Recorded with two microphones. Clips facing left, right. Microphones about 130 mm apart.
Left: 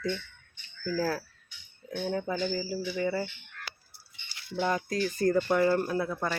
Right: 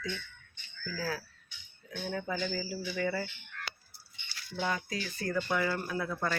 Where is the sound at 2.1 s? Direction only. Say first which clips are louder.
Left 4 dB; 30° left (ahead or behind).